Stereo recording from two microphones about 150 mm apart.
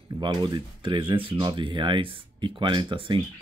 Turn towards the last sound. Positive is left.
turn(degrees=-30)  # may be behind; listen again after turning